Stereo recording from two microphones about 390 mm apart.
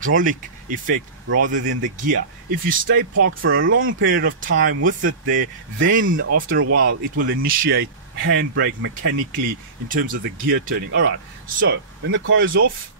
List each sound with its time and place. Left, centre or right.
0.1 s speech: centre